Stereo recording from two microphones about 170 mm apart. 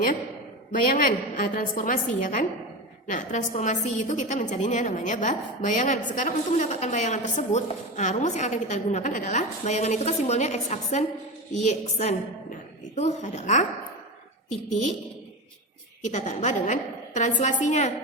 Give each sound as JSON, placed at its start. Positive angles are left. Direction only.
{"t": 0.7, "sound": "a woman's voice", "side_deg": 50}
{"t": 14.7, "sound": "a woman's voice", "side_deg": 45}
{"t": 16.0, "sound": "a woman's voice", "side_deg": 45}